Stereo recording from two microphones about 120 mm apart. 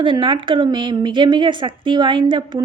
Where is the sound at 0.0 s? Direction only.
45° right (ahead or behind).